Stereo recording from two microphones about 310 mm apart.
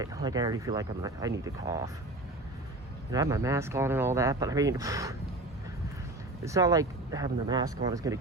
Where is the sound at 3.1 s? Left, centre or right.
Centre.